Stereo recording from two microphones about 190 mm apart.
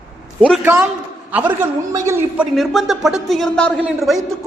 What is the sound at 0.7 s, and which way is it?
Speech, 10° right (ahead or behind).